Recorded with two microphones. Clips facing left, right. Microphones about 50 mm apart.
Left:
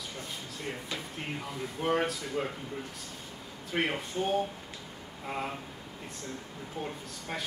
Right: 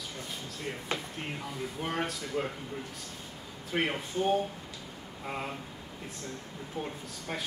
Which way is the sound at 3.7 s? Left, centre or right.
Centre.